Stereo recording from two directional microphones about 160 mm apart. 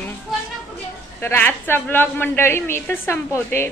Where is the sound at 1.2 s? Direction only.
10° left (ahead or behind).